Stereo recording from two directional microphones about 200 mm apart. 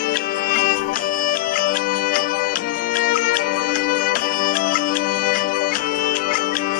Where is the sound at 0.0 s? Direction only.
50° left (ahead or behind).